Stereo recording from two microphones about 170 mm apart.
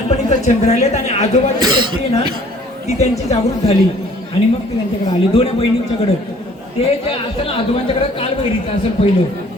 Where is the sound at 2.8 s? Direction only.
40° left (ahead or behind).